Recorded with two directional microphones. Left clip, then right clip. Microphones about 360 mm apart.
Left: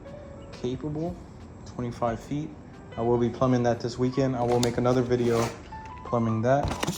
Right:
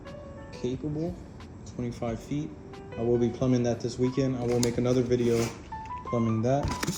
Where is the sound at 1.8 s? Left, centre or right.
Centre.